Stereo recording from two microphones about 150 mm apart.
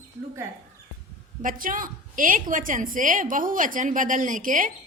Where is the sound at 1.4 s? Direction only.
65° right (ahead or behind).